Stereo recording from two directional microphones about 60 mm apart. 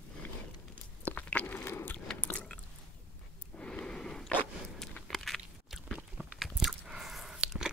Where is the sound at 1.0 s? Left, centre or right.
Left.